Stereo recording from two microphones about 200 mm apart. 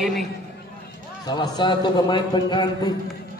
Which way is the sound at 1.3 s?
20° left (ahead or behind).